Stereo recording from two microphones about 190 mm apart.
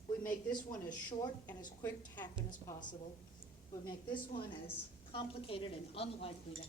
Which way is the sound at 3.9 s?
25° left (ahead or behind).